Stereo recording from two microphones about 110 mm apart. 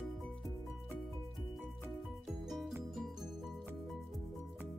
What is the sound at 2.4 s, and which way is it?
Music, centre (ahead or behind).